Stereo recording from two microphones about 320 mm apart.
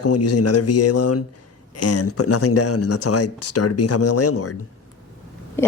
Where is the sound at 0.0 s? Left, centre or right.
Left.